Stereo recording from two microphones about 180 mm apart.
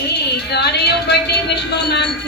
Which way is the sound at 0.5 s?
70° left (ahead or behind).